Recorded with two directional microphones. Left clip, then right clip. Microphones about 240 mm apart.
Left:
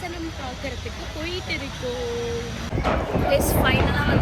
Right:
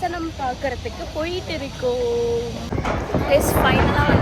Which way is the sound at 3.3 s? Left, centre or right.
Centre.